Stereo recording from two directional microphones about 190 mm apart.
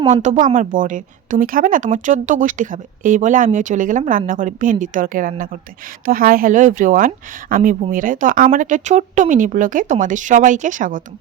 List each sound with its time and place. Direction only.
0.1 s a woman's voice: 40° right (ahead or behind)